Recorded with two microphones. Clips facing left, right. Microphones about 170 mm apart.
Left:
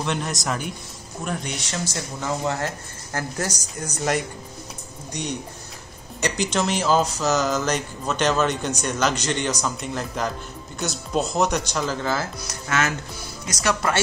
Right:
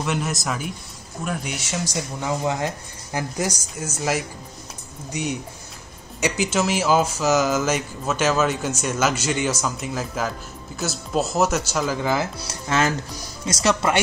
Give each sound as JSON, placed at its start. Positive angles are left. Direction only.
{"t": 0.0, "sound": "speech", "side_deg": -5}
{"t": 12.4, "sound": "speech", "side_deg": -30}